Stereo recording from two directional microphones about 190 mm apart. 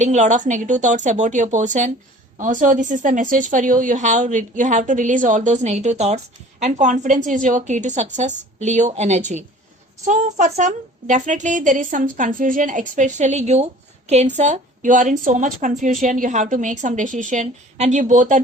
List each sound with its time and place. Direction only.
0.0 s a woman's voice: 40° right (ahead or behind)